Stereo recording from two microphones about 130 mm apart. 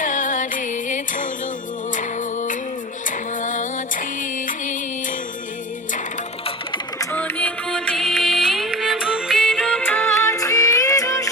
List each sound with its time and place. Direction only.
0.0 s music: 80° left
7.0 s music: 15° left (ahead or behind)